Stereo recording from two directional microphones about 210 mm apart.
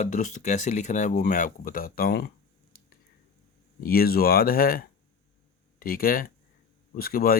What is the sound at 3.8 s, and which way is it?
Speech, 45° left (ahead or behind).